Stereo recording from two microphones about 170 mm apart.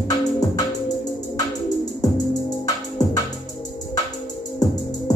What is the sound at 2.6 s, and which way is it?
Music, 20° left (ahead or behind).